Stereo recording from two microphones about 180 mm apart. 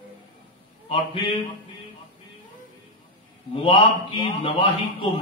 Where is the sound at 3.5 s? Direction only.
30° left (ahead or behind).